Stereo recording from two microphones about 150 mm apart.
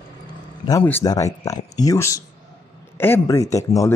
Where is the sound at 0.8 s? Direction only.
15° left (ahead or behind).